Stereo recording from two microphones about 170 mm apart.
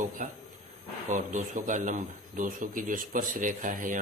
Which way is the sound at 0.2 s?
50° right (ahead or behind).